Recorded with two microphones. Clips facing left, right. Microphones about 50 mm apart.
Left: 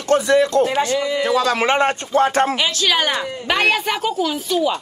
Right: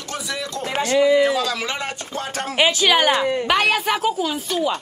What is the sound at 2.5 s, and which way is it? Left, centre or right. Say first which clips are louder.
Speech: right 2 dB; centre.